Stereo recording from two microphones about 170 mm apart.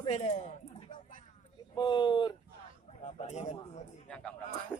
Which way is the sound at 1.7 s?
25° left (ahead or behind).